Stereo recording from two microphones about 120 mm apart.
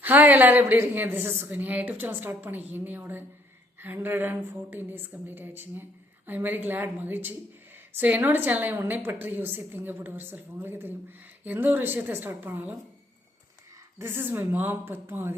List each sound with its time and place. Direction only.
0.0 s a woman's voice: 15° right (ahead or behind)
14.0 s a woman's voice: 20° right (ahead or behind)